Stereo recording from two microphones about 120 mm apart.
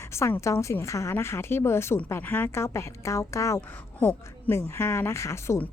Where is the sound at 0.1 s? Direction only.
20° left (ahead or behind).